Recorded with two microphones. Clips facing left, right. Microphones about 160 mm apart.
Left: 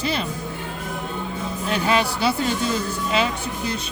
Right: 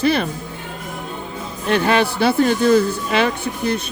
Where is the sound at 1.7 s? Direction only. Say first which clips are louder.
Right 5 dB; 60° right (ahead or behind).